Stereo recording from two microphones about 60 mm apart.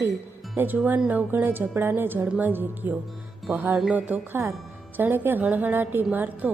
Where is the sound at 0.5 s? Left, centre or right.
Right.